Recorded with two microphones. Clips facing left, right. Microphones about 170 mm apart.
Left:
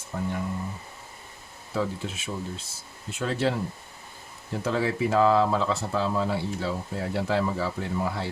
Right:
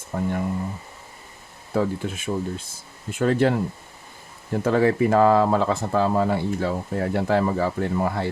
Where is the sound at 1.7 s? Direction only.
50° right (ahead or behind).